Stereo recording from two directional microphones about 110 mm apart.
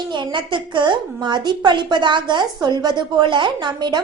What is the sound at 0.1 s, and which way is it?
A woman's voice, 45° right (ahead or behind).